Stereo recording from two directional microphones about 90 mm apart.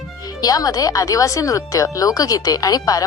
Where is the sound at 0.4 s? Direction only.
45° left (ahead or behind).